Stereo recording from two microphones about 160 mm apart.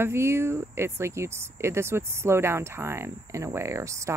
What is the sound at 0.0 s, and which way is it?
Speech, 15° right (ahead or behind).